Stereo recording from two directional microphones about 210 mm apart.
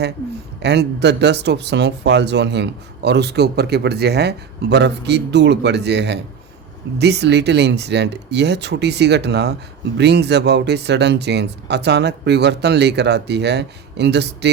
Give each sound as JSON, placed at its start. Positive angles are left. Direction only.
{"t": 0.6, "sound": "speech", "side_deg": -50}